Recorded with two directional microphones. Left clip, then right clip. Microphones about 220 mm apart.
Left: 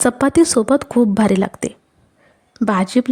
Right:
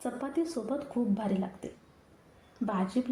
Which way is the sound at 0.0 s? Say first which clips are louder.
Left 19 dB; 55° left (ahead or behind).